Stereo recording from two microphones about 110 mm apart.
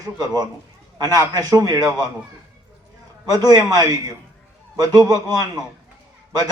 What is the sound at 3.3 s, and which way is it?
A man's voice, 40° right (ahead or behind).